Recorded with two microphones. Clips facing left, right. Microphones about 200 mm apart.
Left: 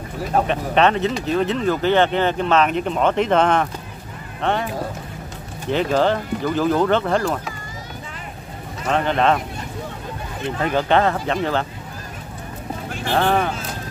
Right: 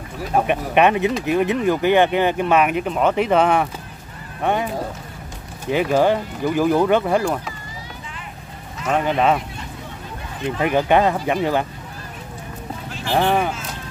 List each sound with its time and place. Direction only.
0.3 s speech: 15° right (ahead or behind)
5.7 s speech: 10° right (ahead or behind)
8.8 s speech: 5° right (ahead or behind)
10.6 s speech: 15° right (ahead or behind)
13.1 s speech: 10° right (ahead or behind)